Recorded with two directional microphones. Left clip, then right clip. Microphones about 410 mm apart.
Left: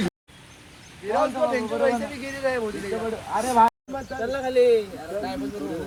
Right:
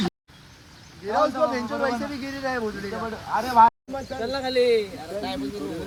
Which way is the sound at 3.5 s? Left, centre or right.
Centre.